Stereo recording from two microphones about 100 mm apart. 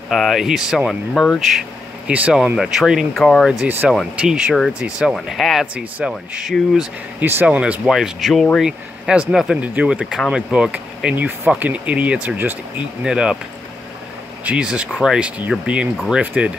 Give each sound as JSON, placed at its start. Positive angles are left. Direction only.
{"t": 0.1, "sound": "speech", "side_deg": 0}
{"t": 1.1, "sound": "speech", "side_deg": 10}
{"t": 2.0, "sound": "speech", "side_deg": -10}
{"t": 3.6, "sound": "speech", "side_deg": -20}
{"t": 5.1, "sound": "speech", "side_deg": 0}
{"t": 7.2, "sound": "speech", "side_deg": -20}
{"t": 7.8, "sound": "speech", "side_deg": 0}
{"t": 14.4, "sound": "speech", "side_deg": -10}